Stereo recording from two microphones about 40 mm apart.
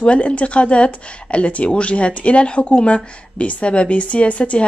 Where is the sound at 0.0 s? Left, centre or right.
Left.